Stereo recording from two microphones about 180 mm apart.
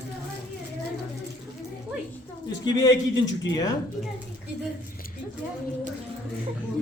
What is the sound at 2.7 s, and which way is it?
Speech, 20° left (ahead or behind).